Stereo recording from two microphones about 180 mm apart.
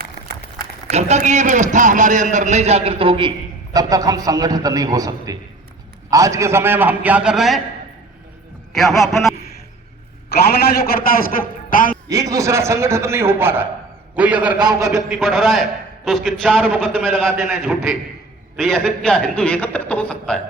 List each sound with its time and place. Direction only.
0.9 s a man's voice: 40° right (ahead or behind); by 7.6 s centre (ahead or behind)
8.7 s a man's voice: centre (ahead or behind)
9.3 s a sound: 60° left (ahead or behind)
10.2 s a man's voice: 60° left (ahead or behind)
12.0 s a man's voice: 20° right (ahead or behind)
14.6 s speech: 20° right (ahead or behind)
14.9 s a man's voice: centre (ahead or behind)